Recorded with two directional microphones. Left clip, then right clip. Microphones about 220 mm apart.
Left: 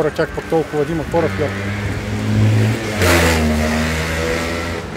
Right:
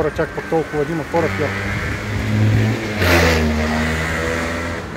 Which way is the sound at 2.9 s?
40° left (ahead or behind).